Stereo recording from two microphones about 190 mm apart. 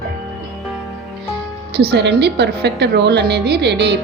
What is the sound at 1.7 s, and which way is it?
Speech, 60° right (ahead or behind).